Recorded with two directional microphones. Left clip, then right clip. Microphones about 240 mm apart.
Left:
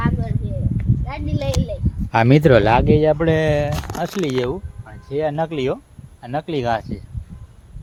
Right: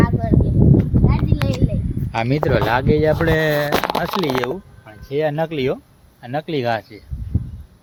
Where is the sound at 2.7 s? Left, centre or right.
Left.